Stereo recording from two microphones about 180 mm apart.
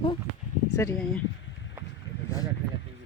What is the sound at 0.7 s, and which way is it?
Speech, 15° left (ahead or behind).